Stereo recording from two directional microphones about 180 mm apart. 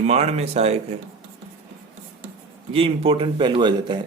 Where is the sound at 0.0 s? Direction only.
35° right (ahead or behind).